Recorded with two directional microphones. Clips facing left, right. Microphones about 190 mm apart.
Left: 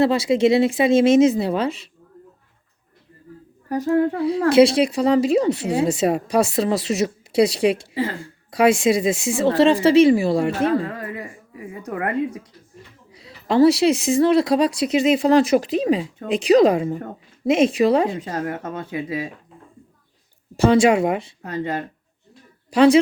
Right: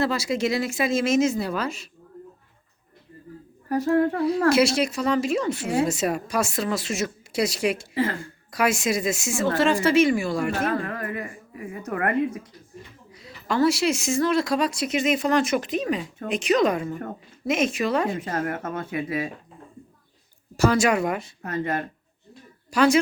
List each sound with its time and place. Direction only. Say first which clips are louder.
0.0 s speech: left 7 dB; 30° left (ahead or behind)
3.7 s speech: left 2 dB; 15° left (ahead or behind)
7.9 s a woman's voice: even; 15° left (ahead or behind)
8.4 s speech: left 7 dB; 30° left (ahead or behind)
10.8 s a woman's voice: even; 15° left (ahead or behind)
13.1 s speech: left 7 dB; 30° left (ahead or behind)
18.2 s a woman's voice: left 1 dB; 20° left (ahead or behind)
20.6 s speech: left 5 dB; 30° left (ahead or behind)
21.4 s a woman's voice: right 2 dB; 15° left (ahead or behind)
22.7 s speech: left 6 dB; 30° left (ahead or behind)